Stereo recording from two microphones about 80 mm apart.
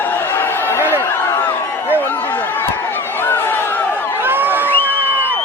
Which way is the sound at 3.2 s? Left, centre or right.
Left.